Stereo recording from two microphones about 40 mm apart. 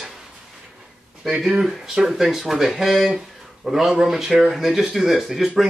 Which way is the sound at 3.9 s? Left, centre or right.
Centre.